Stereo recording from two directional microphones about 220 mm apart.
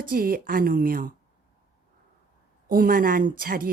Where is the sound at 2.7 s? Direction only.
40° right (ahead or behind).